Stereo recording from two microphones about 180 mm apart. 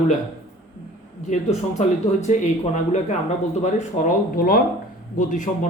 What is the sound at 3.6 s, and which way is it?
Speech, 45° left (ahead or behind).